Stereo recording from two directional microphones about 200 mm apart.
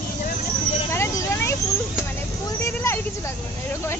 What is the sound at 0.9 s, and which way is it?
Vehicle, 15° left (ahead or behind).